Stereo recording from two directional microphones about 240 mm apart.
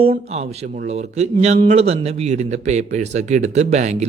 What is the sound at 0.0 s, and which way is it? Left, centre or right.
A man's voice, right.